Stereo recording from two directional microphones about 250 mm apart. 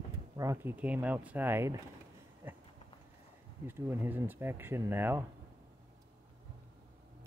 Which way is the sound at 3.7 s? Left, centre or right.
Centre.